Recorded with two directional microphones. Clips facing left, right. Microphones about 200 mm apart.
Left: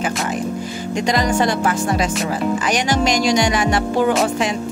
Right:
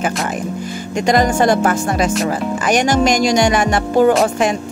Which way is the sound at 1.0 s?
50° right (ahead or behind).